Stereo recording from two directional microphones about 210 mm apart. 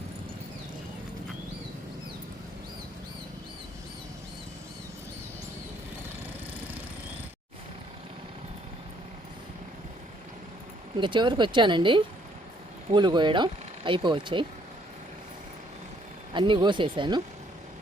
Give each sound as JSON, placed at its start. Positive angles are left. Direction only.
{"t": 10.9, "sound": "speech", "side_deg": -20}
{"t": 16.3, "sound": "speech", "side_deg": -20}